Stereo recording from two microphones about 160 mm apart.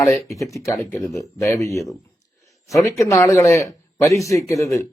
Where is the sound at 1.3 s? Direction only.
20° left (ahead or behind).